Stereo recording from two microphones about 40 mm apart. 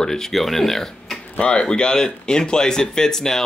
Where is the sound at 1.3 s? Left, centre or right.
Left.